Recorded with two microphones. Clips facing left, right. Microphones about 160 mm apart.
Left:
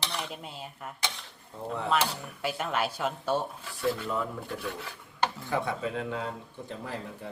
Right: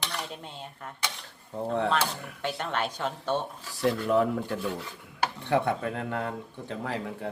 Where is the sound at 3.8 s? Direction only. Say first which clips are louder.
Right 6 dB; 80° right.